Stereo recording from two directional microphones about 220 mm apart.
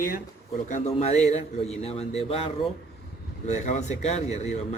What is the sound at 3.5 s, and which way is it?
A man's voice, 30° left (ahead or behind).